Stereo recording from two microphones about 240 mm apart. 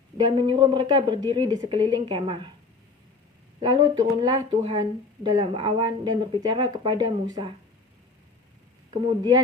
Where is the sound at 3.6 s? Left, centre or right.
Centre.